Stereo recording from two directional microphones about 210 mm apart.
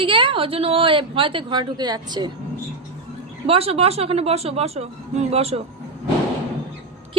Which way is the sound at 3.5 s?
30° right (ahead or behind).